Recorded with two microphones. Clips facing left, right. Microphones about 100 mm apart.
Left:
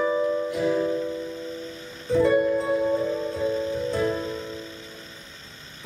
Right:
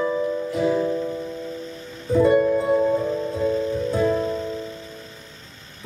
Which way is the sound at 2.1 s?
5° right (ahead or behind).